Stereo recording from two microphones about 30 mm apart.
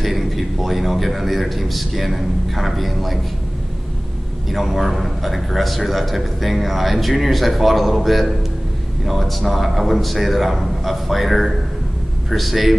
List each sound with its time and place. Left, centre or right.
0.0 s a man's voice: centre
4.5 s a man's voice: centre